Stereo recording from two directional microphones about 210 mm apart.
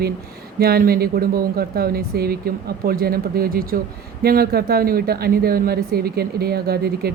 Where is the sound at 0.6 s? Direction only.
45° right (ahead or behind).